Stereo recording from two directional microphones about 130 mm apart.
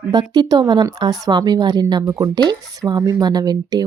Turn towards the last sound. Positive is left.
turn(degrees=-30)  # may be behind; listen again after turning